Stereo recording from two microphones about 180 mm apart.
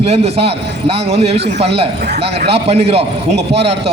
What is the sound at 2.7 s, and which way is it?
Speech, 35° right (ahead or behind).